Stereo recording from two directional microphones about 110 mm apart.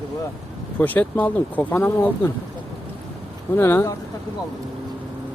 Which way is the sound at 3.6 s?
20° left (ahead or behind).